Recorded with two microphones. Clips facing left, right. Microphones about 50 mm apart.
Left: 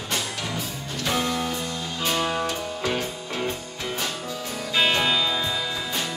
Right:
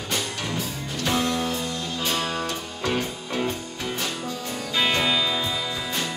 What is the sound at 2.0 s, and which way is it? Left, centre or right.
Music, centre.